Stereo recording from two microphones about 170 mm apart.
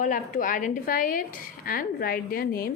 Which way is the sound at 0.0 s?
50° left (ahead or behind).